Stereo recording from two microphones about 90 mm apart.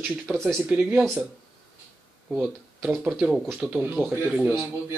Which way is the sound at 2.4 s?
10° right (ahead or behind).